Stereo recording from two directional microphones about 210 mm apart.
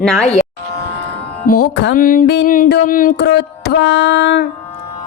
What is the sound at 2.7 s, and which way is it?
Speech, 40° left (ahead or behind).